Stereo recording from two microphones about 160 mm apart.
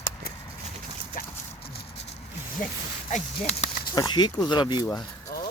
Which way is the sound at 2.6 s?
55° left (ahead or behind).